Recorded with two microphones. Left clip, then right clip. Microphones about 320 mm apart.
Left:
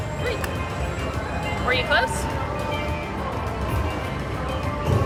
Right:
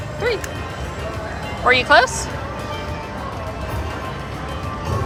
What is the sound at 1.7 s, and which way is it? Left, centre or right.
Speech, centre.